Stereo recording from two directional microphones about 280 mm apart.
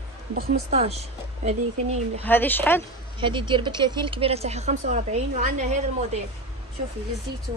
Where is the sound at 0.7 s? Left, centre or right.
Right.